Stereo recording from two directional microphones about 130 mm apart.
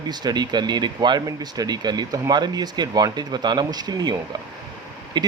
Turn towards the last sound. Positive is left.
turn(degrees=-35)  # may be behind; listen again after turning